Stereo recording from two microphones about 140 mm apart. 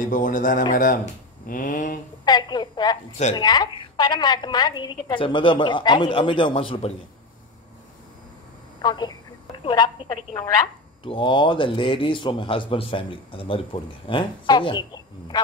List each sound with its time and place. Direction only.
0.0 s speech: 70° left (ahead or behind)
2.2 s speech: 30° left (ahead or behind)
8.8 s speech: 30° left (ahead or behind)